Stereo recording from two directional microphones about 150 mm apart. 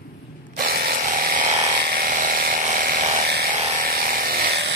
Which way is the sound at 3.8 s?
75° right (ahead or behind).